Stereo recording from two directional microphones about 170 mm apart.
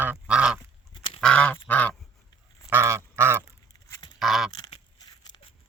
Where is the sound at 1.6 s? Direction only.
10° left (ahead or behind).